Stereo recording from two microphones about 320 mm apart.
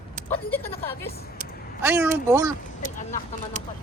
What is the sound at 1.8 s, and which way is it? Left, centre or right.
Speech, centre.